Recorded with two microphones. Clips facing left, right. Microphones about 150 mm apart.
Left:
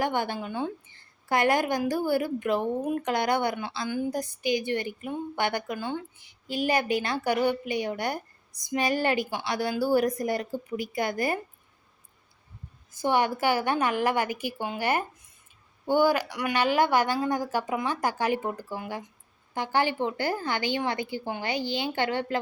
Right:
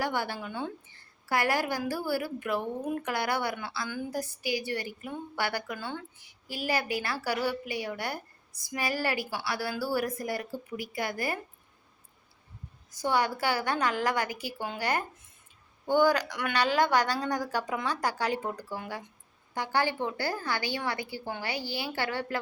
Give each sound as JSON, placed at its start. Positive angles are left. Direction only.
{"t": 0.0, "sound": "a woman's voice", "side_deg": 20}
{"t": 13.0, "sound": "a woman's voice", "side_deg": 15}